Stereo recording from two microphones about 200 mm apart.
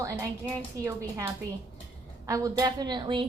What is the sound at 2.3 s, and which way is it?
Speech, 20° right (ahead or behind).